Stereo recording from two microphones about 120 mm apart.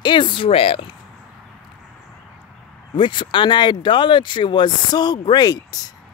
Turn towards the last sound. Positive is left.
turn(degrees=35)  # may be behind; listen again after turning